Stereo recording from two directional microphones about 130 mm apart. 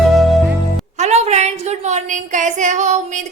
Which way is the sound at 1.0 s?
55° right (ahead or behind).